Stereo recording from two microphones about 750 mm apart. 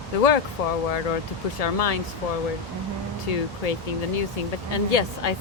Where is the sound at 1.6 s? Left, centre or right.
Left.